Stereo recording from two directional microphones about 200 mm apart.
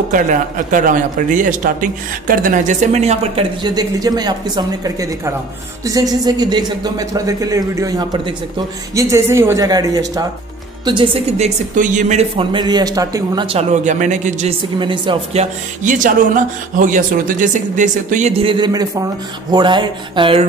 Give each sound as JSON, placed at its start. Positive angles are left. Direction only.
{"t": 0.1, "sound": "a man's voice", "side_deg": -40}
{"t": 14.8, "sound": "speech", "side_deg": -25}
{"t": 15.8, "sound": "a man's voice", "side_deg": -40}